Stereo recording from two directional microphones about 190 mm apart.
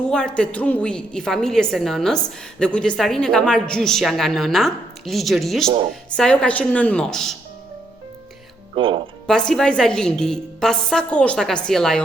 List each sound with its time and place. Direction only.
0.1 s a woman's voice: 5° left (ahead or behind)
8.7 s speech: 30° right (ahead or behind)
9.2 s a woman's voice: 5° left (ahead or behind)